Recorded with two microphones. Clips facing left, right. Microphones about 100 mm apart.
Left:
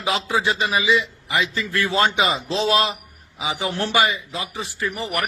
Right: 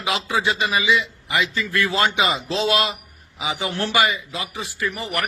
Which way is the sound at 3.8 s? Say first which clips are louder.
Even; 15° left (ahead or behind).